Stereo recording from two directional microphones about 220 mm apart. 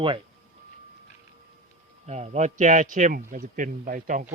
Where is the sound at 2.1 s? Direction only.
30° right (ahead or behind).